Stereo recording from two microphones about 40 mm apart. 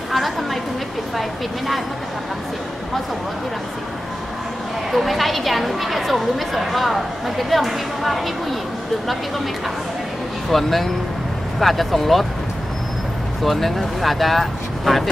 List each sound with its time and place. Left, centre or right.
0.1 s a sound: centre
4.9 s a woman's voice: centre
10.5 s a woman's voice: centre
13.4 s a woman's voice: centre